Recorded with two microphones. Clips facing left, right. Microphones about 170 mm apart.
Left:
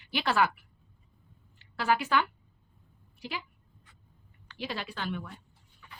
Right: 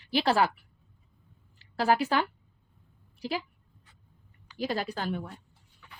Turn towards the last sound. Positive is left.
turn(degrees=-40)  # may be behind; listen again after turning